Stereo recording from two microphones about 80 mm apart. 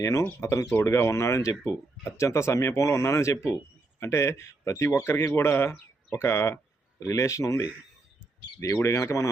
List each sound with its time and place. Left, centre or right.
0.0 s speech: left
8.7 s speech: left